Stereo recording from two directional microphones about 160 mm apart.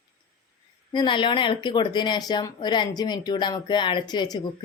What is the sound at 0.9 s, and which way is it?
A woman's voice, 30° left (ahead or behind).